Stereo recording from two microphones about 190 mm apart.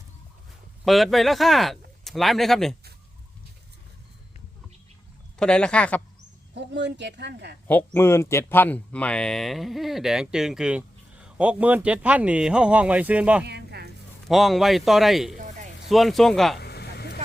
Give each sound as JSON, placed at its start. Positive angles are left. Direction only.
{"t": 0.9, "sound": "speech", "side_deg": 0}
{"t": 5.4, "sound": "speech", "side_deg": 5}
{"t": 6.5, "sound": "speech", "side_deg": -65}
{"t": 7.7, "sound": "speech", "side_deg": 10}
{"t": 13.4, "sound": "a sound", "side_deg": -60}
{"t": 14.3, "sound": "speech", "side_deg": 0}
{"t": 16.6, "sound": "vehicle", "side_deg": 60}